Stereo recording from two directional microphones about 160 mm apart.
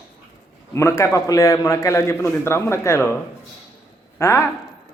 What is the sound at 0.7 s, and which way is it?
A man's voice, 15° left (ahead or behind).